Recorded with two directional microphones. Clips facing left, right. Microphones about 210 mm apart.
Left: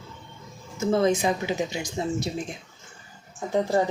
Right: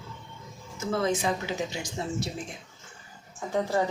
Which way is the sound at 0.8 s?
20° left (ahead or behind).